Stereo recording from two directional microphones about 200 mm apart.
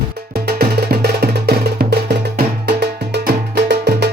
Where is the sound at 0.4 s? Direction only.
55° right (ahead or behind).